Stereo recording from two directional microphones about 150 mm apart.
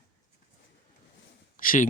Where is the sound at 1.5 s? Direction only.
65° left (ahead or behind).